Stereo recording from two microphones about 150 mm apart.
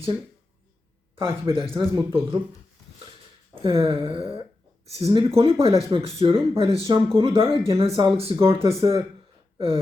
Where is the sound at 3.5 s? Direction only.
40° right (ahead or behind).